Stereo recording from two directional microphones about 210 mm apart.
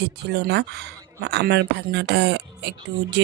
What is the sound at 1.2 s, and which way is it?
Speech, 55° right (ahead or behind).